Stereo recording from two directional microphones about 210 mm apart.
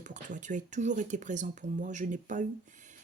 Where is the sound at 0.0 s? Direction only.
35° right (ahead or behind).